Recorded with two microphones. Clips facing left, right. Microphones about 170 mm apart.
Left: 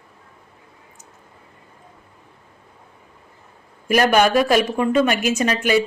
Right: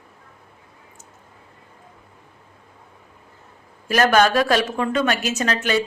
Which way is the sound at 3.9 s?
10° left (ahead or behind).